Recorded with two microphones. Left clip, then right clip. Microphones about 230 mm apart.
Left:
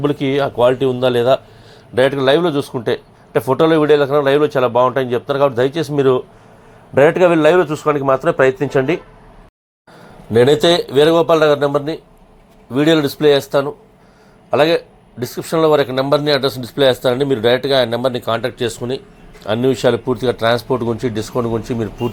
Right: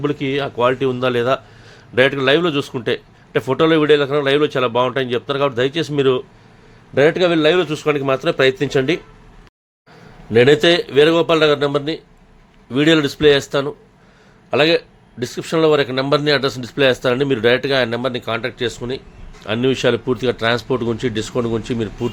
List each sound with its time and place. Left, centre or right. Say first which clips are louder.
0.0 s speech: left 4 dB; centre
2.1 s a man's voice: left 2 dB; right
6.9 s speech: left 3 dB; centre
7.9 s speech: left 3 dB; centre
10.3 s speech: left 1 dB; centre
11.3 s a man's voice: left 2 dB; right
12.8 s speech: even; centre
14.5 s speech: left 1 dB; centre